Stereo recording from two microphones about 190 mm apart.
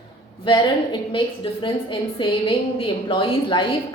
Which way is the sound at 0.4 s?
25° left (ahead or behind).